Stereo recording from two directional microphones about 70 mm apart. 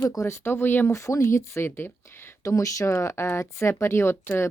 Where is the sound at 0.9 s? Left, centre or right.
Left.